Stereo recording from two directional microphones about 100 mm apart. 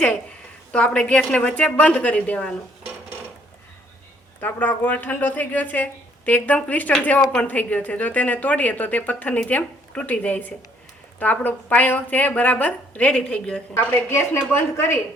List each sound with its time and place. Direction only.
0.7 s speech: 10° left (ahead or behind)
4.4 s speech: 20° left (ahead or behind)
13.7 s a woman's voice: 25° left (ahead or behind)